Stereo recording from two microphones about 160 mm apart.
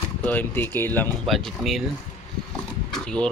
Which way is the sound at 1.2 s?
Centre (ahead or behind).